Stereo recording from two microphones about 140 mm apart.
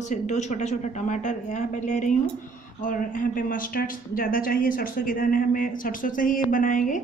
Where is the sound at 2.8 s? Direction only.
70° left (ahead or behind).